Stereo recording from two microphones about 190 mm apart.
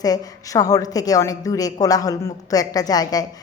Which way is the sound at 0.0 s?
20° left (ahead or behind).